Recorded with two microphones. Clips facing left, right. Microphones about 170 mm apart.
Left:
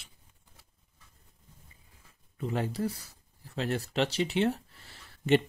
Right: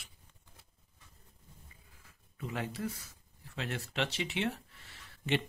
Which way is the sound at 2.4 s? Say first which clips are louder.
Left 6 dB; 35° left (ahead or behind).